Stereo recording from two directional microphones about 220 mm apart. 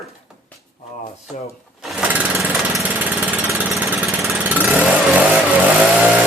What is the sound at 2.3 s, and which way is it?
Jackhammer, 5° right (ahead or behind).